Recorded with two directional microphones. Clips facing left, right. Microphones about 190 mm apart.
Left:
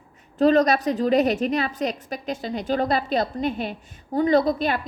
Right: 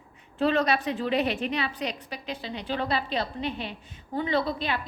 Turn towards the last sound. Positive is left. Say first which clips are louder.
# left 7 dB
turn(degrees=45)  # may be behind; listen again after turning